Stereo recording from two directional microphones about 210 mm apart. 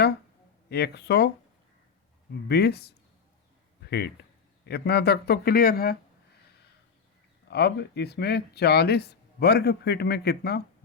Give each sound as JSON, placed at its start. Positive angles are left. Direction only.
{"t": 0.7, "sound": "speech", "side_deg": 50}
{"t": 2.5, "sound": "speech", "side_deg": 50}
{"t": 7.4, "sound": "speech", "side_deg": 50}